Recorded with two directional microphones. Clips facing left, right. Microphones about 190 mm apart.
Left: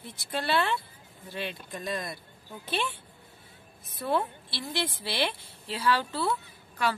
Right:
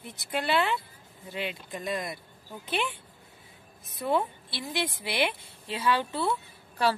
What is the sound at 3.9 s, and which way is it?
A woman's voice, 15° right (ahead or behind).